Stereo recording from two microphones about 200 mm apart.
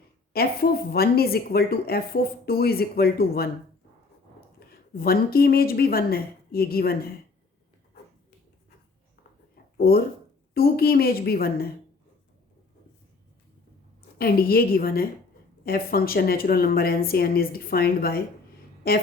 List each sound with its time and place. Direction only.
0.3 s speech: 50° left (ahead or behind)
4.7 s speech: 50° left (ahead or behind)
9.7 s speech: 50° left (ahead or behind)
14.2 s speech: 50° left (ahead or behind)